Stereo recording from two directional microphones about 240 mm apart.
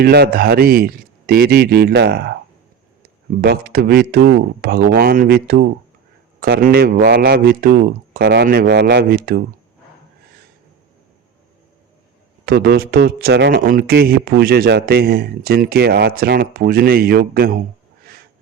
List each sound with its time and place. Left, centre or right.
0.0 s speech: right
3.4 s speech: right
12.5 s speech: right